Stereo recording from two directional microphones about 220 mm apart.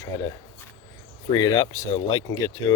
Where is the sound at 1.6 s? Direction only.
15° left (ahead or behind).